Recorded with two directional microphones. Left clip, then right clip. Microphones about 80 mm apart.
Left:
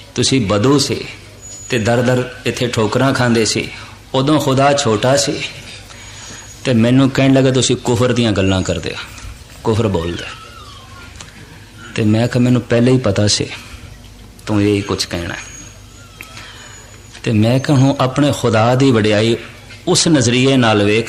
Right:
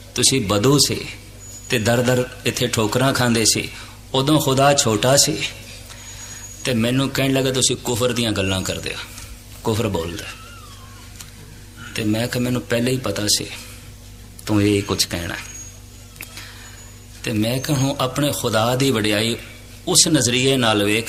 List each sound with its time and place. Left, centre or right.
0.1 s a man's voice: right
6.6 s a man's voice: right
11.9 s a man's voice: right
16.1 s a sound: right
17.2 s a man's voice: right